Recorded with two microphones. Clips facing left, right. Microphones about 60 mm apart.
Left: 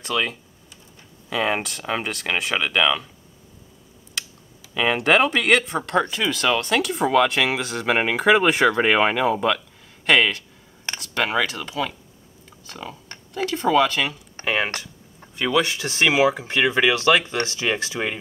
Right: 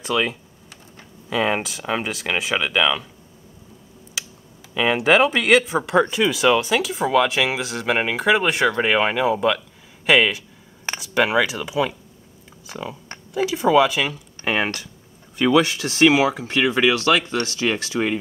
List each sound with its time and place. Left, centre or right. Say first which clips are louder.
0.0 s speech: right 2 dB; centre
4.2 s computer keyboard: even; centre
4.7 s speech: right 2 dB; centre
15.6 s speech: right 4 dB; left